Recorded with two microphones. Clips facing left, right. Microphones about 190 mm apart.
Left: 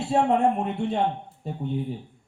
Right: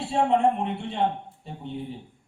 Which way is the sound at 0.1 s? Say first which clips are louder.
Left 1 dB; 45° left (ahead or behind).